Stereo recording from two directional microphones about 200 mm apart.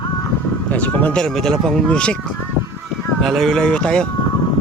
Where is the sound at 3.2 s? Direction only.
Centre (ahead or behind).